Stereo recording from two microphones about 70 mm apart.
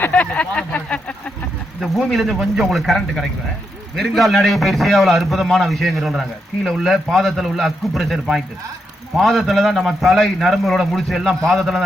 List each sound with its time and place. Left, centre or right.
0.1 s speech: centre
1.8 s a man's voice: centre